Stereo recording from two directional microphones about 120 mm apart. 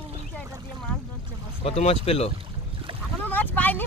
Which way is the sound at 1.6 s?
60° left (ahead or behind).